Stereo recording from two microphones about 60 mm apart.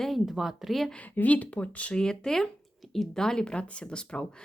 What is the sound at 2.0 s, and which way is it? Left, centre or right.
Speech, centre.